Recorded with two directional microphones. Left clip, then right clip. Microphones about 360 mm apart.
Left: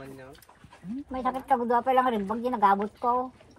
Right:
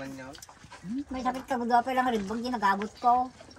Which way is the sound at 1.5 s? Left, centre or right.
Centre.